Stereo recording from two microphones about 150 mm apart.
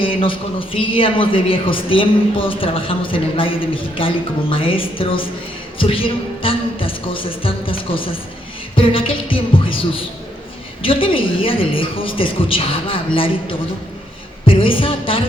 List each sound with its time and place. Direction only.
0.0 s a man's voice: 35° left (ahead or behind)
14.4 s a man's voice: 35° left (ahead or behind)